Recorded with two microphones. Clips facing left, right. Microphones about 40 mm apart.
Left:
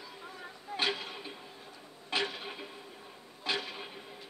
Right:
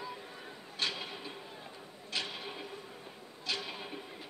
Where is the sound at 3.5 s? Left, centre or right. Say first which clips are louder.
Left 4 dB; left.